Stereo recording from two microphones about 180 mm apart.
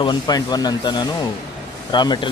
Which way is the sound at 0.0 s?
25° left (ahead or behind).